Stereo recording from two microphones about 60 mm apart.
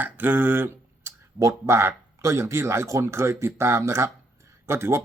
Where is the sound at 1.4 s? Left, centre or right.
Right.